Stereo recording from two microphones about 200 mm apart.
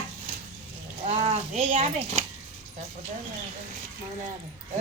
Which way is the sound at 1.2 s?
30° right (ahead or behind).